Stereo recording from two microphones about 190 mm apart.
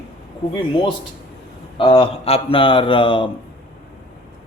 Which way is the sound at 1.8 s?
25° left (ahead or behind).